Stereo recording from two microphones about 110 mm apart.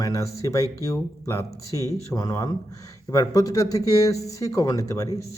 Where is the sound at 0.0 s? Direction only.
30° left (ahead or behind).